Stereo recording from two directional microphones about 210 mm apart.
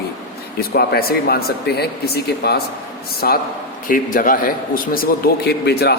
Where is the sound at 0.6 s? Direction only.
45° left (ahead or behind).